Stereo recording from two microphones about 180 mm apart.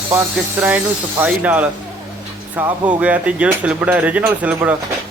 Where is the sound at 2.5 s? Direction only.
25° right (ahead or behind).